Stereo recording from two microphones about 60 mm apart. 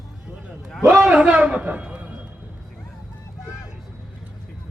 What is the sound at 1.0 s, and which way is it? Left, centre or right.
Speech, centre.